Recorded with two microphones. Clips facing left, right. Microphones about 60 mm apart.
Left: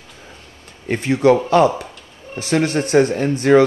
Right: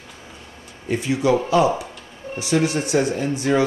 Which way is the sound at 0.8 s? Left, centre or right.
Left.